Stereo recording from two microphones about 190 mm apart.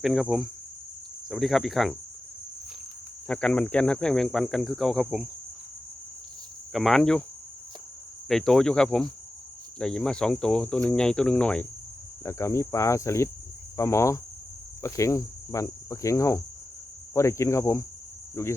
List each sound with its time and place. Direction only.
0.0 s cricket: centre (ahead or behind)
3.2 s cricket: 5° left (ahead or behind)
6.7 s cricket: centre (ahead or behind)
8.3 s cricket: 5° left (ahead or behind)